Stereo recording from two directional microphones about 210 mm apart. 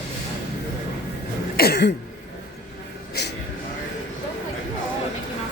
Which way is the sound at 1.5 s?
50° left (ahead or behind).